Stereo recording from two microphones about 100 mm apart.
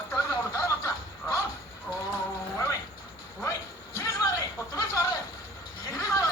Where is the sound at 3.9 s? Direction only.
30° left (ahead or behind).